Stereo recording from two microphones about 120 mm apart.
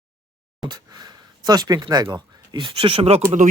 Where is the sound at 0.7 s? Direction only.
35° right (ahead or behind).